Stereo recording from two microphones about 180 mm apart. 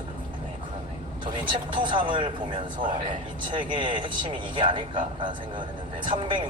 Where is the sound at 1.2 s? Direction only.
25° right (ahead or behind).